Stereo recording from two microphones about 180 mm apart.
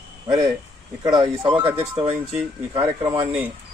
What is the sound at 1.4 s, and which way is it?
Speech, 25° right (ahead or behind).